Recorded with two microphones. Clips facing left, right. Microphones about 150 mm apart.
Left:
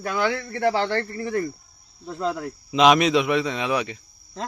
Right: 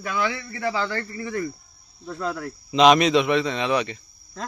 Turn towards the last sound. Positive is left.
turn(degrees=5)  # may be behind; listen again after turning